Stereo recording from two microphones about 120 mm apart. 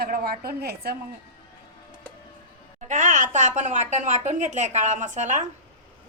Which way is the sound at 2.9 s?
90° right.